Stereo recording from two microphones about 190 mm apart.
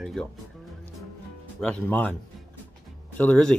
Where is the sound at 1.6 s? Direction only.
5° left (ahead or behind).